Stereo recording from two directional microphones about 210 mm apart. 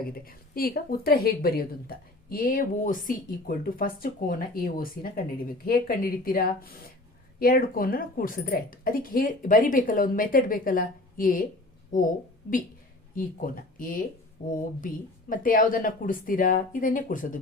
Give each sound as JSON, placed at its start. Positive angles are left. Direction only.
{"t": 0.0, "sound": "a woman's voice", "side_deg": 45}
{"t": 13.1, "sound": "speech", "side_deg": 40}